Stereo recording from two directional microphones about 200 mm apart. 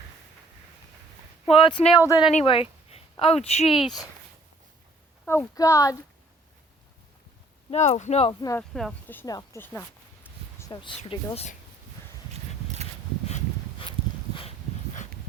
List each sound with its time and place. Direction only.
1.5 s speech: 25° left (ahead or behind)
3.7 s speech: centre (ahead or behind)
5.2 s speech: 10° left (ahead or behind)
7.7 s speech: 35° left (ahead or behind)
8.4 s speech: 15° left (ahead or behind)
8.7 s speech: centre (ahead or behind)
10.3 s a sound: 10° left (ahead or behind)
10.7 s speech: 25° left (ahead or behind)
12.3 s a sound: 30° right (ahead or behind)
13.2 s a sound: 30° left (ahead or behind)